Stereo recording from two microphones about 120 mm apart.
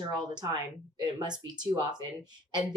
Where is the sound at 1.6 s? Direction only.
35° right (ahead or behind).